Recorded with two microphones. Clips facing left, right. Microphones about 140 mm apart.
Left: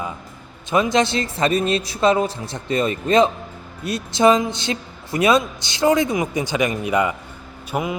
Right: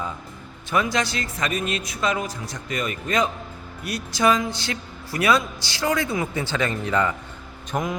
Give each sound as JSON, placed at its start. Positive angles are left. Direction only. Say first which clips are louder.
{"t": 0.7, "sound": "a woman's voice", "louder": "left 5 dB", "side_deg": 20}